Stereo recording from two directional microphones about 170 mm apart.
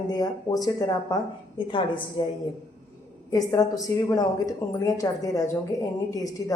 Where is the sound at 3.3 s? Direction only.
20° left (ahead or behind).